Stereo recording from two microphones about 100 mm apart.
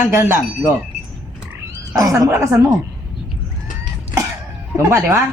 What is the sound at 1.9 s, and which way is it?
Speech, 35° right (ahead or behind).